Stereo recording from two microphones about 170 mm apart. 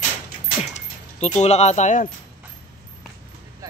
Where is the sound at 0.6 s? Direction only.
40° left (ahead or behind).